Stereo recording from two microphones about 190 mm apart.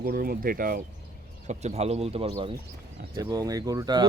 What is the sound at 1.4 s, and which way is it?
Speech, 35° right (ahead or behind).